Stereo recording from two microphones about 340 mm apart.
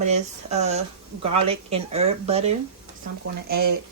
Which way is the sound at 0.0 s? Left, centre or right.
Centre.